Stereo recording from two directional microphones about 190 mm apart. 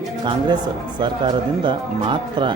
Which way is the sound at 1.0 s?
25° right (ahead or behind).